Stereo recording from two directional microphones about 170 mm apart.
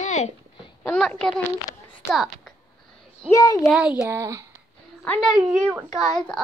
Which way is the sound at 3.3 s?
20° left (ahead or behind).